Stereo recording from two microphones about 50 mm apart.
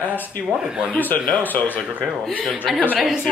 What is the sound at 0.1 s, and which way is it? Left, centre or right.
Speech, left.